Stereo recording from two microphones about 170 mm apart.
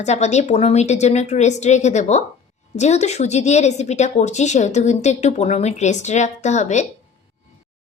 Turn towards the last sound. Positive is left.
turn(degrees=45)  # may be behind; listen again after turning